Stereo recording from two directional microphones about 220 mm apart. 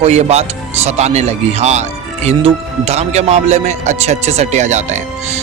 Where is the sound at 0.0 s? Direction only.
30° right (ahead or behind).